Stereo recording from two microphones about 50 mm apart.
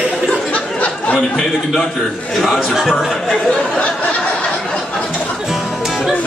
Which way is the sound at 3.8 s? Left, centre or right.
Left.